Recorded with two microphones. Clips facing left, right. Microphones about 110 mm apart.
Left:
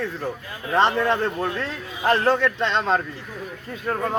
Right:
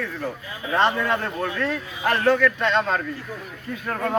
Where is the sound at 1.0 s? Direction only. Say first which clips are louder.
Left 2 dB; 25° left (ahead or behind).